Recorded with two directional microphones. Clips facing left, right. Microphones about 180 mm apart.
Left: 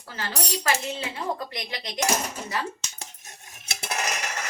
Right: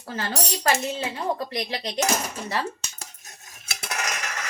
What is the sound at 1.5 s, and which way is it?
Speech, 30° right (ahead or behind).